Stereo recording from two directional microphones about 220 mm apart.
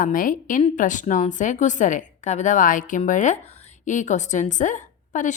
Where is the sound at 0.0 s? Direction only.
40° left (ahead or behind).